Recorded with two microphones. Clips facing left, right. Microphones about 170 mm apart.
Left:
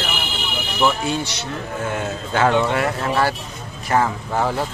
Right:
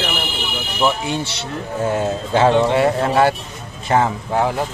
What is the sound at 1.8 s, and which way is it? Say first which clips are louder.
A man's voice: right 7 dB; 35° right (ahead or behind).